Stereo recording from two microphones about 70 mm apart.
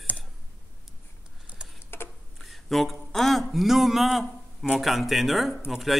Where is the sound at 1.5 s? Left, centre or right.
Centre.